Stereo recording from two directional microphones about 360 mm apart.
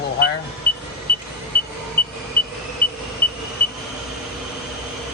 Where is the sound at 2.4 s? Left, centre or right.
Left.